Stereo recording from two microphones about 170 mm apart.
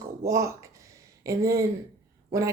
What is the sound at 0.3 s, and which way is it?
A woman's voice, 20° right (ahead or behind).